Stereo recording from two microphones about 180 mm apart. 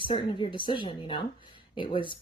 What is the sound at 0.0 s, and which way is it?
Speech, 25° left (ahead or behind).